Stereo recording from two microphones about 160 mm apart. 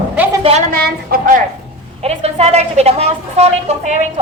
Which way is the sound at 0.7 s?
70° right (ahead or behind).